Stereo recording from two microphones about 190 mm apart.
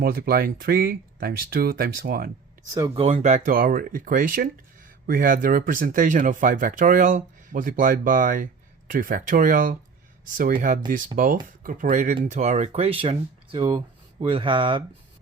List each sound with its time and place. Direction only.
0.0 s speech: 55° right (ahead or behind)
2.7 s speech: 20° right (ahead or behind)
3.0 s speech: 35° right (ahead or behind)